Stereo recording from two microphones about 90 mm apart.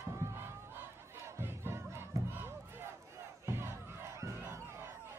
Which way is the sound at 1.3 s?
30° right (ahead or behind).